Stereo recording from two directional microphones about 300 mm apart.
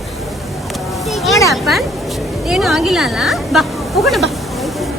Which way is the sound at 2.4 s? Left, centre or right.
Centre.